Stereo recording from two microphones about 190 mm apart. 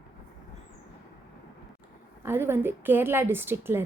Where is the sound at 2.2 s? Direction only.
10° right (ahead or behind).